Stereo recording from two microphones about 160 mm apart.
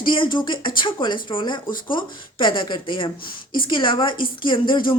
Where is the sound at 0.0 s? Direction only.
30° left (ahead or behind).